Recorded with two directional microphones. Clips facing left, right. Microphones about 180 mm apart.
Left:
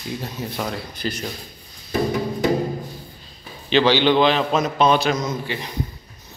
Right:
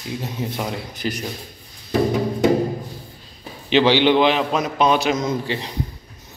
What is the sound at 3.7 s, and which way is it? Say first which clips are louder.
A man's voice: right 1 dB; 15° right (ahead or behind).